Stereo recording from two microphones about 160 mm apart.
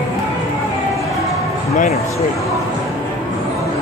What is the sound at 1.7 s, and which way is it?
Speech, 45° left (ahead or behind).